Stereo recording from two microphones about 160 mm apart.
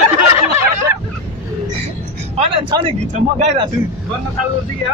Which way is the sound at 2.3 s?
35° right (ahead or behind).